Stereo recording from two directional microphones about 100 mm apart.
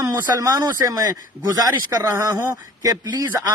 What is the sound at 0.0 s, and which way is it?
A man's voice, 40° right (ahead or behind).